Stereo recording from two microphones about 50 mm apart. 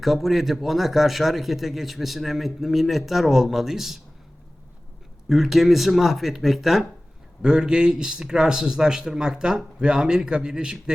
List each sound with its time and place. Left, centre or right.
0.0 s a man's voice: centre
5.3 s a man's voice: centre
7.4 s speech: centre